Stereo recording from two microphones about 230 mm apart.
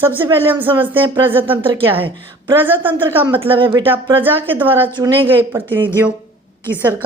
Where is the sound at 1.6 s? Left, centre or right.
Right.